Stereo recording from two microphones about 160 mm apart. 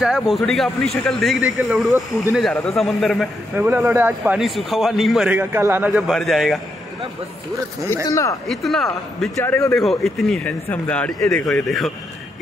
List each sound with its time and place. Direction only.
0.0 s a man's voice: centre (ahead or behind)
3.5 s a man's voice: 15° right (ahead or behind)
5.3 s a man's voice: 15° right (ahead or behind)
5.9 s a man's voice: centre (ahead or behind)
8.1 s speech: 20° left (ahead or behind)
8.5 s a man's voice: centre (ahead or behind)
9.4 s speech: 15° left (ahead or behind)
9.8 s a man's voice: centre (ahead or behind)